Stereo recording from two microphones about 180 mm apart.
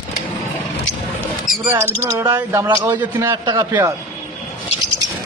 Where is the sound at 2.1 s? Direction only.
15° right (ahead or behind).